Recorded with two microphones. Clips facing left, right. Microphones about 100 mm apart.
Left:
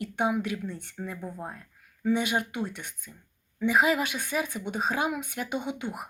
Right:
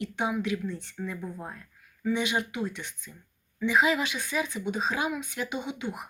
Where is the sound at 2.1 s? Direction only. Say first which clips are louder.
Left 1 dB; 50° left (ahead or behind).